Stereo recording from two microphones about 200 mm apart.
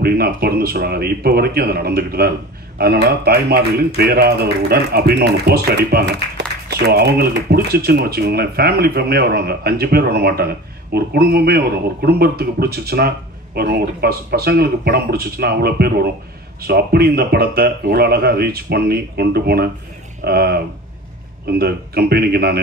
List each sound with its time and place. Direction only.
0.0 s speech: 50° right (ahead or behind)